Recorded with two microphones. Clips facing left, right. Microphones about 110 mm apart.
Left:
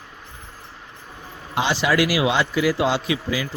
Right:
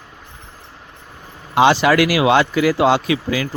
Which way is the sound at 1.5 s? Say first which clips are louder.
Right 8 dB; 70° right (ahead or behind).